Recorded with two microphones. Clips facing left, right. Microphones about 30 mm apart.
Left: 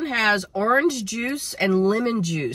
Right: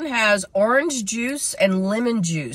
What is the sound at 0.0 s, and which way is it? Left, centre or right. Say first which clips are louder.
Speech: right 2 dB; right.